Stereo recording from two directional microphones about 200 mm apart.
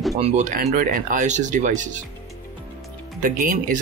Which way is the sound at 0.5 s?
40° right (ahead or behind).